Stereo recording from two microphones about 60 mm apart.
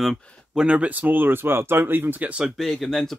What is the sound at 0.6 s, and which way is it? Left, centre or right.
Speech, centre.